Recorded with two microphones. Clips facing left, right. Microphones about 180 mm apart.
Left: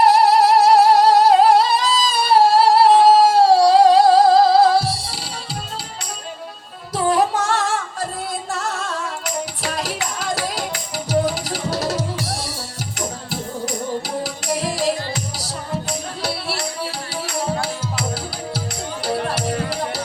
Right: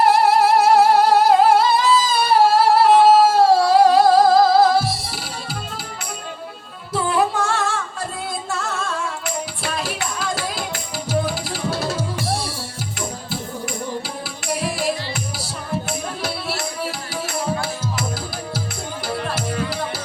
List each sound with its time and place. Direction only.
0.0 s music: 35° left (ahead or behind)
6.9 s music: 40° left (ahead or behind)
8.5 s music: 40° left (ahead or behind)
14.4 s music: 40° left (ahead or behind)
19.0 s music: 35° left (ahead or behind)